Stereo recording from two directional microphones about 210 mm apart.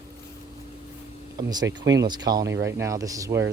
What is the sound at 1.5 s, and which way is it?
Speech, 20° right (ahead or behind).